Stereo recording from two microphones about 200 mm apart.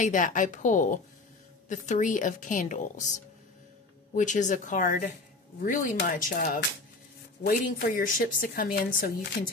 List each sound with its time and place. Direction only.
0.0 s a woman's voice: 40° left (ahead or behind)